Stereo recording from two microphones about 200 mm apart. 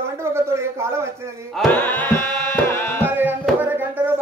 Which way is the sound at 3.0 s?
10° right (ahead or behind).